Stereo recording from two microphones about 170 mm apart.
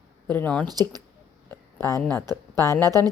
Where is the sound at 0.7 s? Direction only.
25° right (ahead or behind).